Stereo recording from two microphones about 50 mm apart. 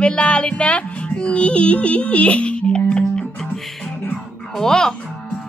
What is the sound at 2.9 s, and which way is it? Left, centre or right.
Music, centre.